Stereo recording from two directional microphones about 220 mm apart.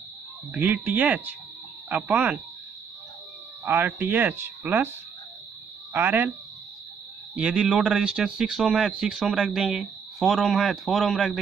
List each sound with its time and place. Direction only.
0.5 s speech: 5° right (ahead or behind)
3.6 s speech: 10° right (ahead or behind)
5.9 s speech: 10° right (ahead or behind)
7.3 s speech: 5° right (ahead or behind)